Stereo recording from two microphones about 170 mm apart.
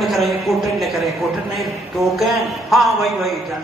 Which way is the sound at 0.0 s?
Centre (ahead or behind).